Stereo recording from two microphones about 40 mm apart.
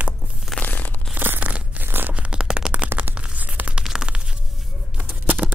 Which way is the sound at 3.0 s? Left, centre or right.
Right.